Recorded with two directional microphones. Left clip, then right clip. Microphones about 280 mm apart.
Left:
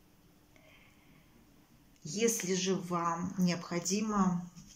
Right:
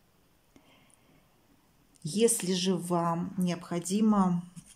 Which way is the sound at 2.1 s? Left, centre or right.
Centre.